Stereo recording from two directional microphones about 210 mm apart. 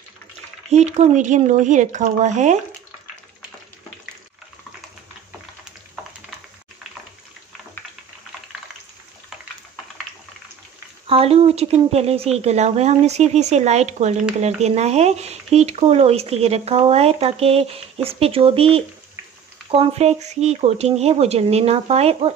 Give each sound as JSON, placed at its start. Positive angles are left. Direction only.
{"t": 0.7, "sound": "speech", "side_deg": -30}
{"t": 11.1, "sound": "speech", "side_deg": -25}